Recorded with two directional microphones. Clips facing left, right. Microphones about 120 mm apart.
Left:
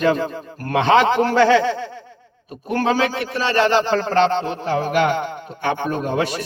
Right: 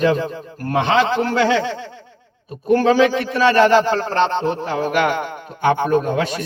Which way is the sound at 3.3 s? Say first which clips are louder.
Right 4 dB; 50° right (ahead or behind).